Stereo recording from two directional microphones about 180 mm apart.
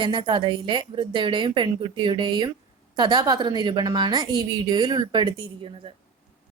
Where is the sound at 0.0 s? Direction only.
30° right (ahead or behind).